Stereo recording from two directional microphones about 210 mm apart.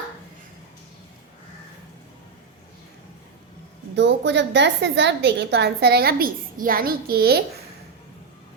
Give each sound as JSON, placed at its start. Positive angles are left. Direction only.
{"t": 3.9, "sound": "a woman's voice", "side_deg": -55}